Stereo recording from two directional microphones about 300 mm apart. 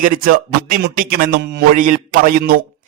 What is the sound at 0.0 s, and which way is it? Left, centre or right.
A man's voice, right.